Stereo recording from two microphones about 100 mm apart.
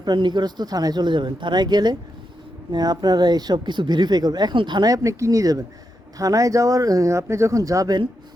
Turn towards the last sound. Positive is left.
turn(degrees=-35)  # may be behind; listen again after turning